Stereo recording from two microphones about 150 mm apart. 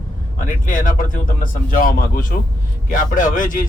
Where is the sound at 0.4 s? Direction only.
65° left (ahead or behind).